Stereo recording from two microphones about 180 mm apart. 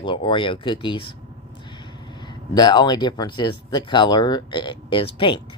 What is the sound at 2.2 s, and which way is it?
Speech, 25° left (ahead or behind).